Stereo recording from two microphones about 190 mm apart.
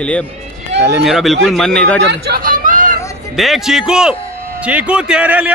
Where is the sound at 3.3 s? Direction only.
Centre (ahead or behind).